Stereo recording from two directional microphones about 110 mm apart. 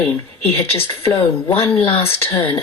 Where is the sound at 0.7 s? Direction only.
60° left (ahead or behind).